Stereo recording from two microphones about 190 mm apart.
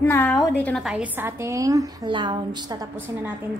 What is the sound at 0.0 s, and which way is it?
Speech, 10° left (ahead or behind).